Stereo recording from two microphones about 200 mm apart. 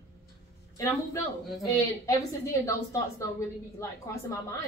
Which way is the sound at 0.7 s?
15° left (ahead or behind).